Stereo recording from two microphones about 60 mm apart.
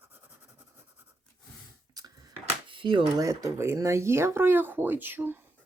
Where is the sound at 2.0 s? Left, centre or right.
Right.